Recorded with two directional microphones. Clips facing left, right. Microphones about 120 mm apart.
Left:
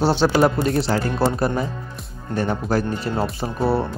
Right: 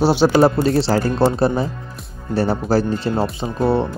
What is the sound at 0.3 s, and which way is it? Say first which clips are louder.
Speech: right 4 dB; 30° right (ahead or behind).